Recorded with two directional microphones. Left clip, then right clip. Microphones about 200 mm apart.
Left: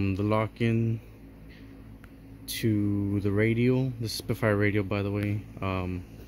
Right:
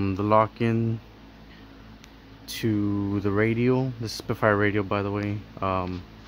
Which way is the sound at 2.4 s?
Centre (ahead or behind).